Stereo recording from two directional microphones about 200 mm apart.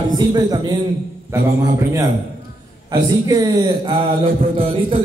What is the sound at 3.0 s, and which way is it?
Speech, 20° right (ahead or behind).